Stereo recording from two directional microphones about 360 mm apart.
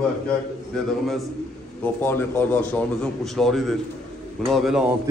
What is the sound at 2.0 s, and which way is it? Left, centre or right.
A man's voice, centre.